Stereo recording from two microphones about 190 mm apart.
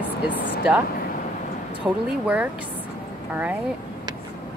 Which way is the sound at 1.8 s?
5° right (ahead or behind).